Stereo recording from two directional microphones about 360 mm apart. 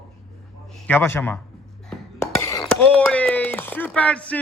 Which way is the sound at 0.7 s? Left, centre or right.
Centre.